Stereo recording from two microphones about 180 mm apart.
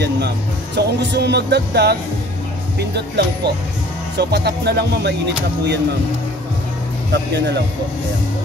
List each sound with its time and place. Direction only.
0.7 s speech: 70° right (ahead or behind)
7.1 s speech: 70° right (ahead or behind)